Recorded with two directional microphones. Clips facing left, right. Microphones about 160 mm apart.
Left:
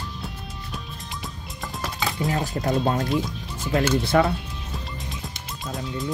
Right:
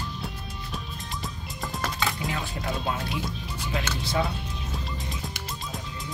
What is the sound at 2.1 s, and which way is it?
Speech, 40° left (ahead or behind).